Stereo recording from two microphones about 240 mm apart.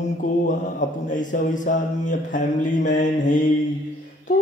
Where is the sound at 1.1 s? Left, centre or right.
Left.